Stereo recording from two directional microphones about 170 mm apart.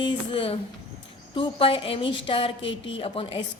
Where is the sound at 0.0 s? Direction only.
30° left (ahead or behind).